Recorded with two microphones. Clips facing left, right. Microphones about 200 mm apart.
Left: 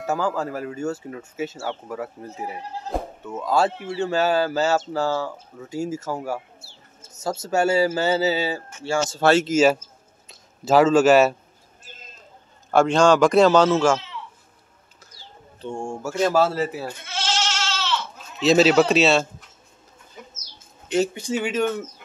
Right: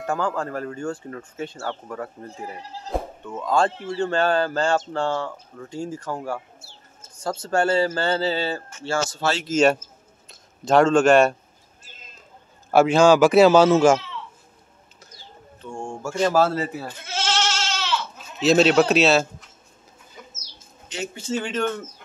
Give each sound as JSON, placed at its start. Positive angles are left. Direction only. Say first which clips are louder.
{"t": 0.0, "sound": "speech", "louder": "left 1 dB", "side_deg": 5}
{"t": 9.2, "sound": "speech", "louder": "left 7 dB", "side_deg": 55}
{"t": 9.5, "sound": "speech", "louder": "left 1 dB", "side_deg": 5}
{"t": 12.7, "sound": "speech", "louder": "right 1 dB", "side_deg": -5}
{"t": 15.7, "sound": "speech", "louder": "left 1 dB", "side_deg": 10}
{"t": 17.6, "sound": "goat", "louder": "even", "side_deg": -10}
{"t": 18.4, "sound": "speech", "louder": "left 1 dB", "side_deg": 0}
{"t": 21.1, "sound": "speech", "louder": "left 2 dB", "side_deg": 10}